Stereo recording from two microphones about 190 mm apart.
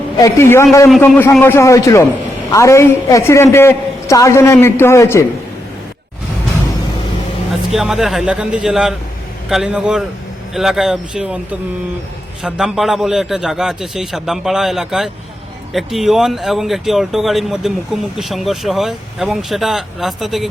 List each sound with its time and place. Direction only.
0.2 s a woman's voice: 15° left (ahead or behind)
0.9 s a woman's voice: centre (ahead or behind)
7.7 s speech: centre (ahead or behind)
12.4 s speech: 5° right (ahead or behind)